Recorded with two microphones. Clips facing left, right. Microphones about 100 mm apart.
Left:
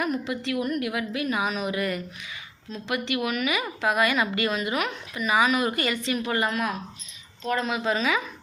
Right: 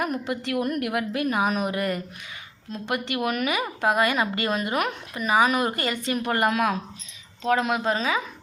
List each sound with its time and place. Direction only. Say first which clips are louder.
0.0 s a woman's voice: even; 50° right (ahead or behind)
6.5 s a woman's voice: right 4 dB; 75° right (ahead or behind)
7.9 s a woman's voice: even; 30° right (ahead or behind)